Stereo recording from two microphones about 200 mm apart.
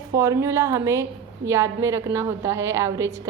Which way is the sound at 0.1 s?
15° right (ahead or behind).